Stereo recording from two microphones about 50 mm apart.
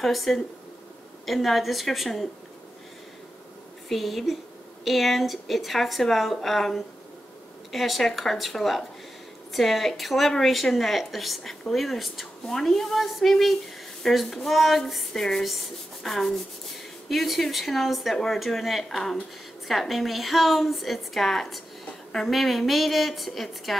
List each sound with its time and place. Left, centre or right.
0.0 s a woman's voice: centre
3.9 s a woman's voice: centre